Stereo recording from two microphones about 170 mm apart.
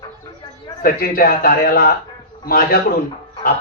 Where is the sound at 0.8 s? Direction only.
60° left (ahead or behind).